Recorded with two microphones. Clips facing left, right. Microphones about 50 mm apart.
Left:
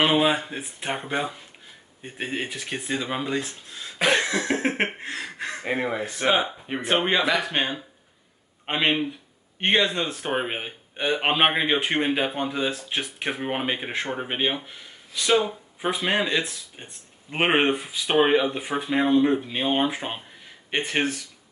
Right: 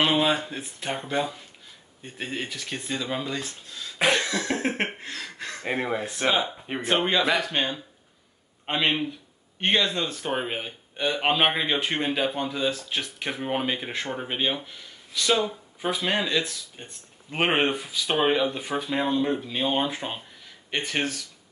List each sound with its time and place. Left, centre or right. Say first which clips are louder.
0.0 s speech: left 2 dB; centre
4.1 s a sound: left 5 dB; left
5.7 s speech: even; centre
6.2 s speech: left 3 dB; left